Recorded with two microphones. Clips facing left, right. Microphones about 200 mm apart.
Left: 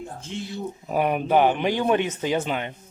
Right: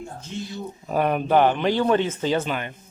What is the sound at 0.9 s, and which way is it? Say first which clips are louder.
Speech: right 1 dB; 10° left (ahead or behind).